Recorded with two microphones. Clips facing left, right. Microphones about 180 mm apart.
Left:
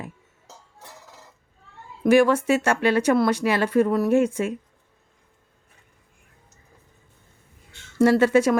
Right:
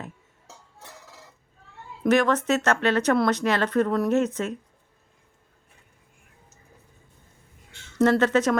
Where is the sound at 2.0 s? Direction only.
10° left (ahead or behind).